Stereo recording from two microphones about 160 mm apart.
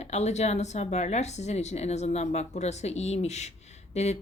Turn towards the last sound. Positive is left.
turn(degrees=45)  # may be behind; listen again after turning